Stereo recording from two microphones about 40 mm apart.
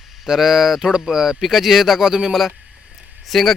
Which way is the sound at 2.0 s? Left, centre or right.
Centre.